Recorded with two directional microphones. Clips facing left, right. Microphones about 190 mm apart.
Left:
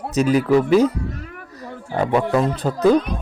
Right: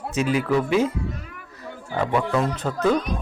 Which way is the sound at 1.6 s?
40° left (ahead or behind).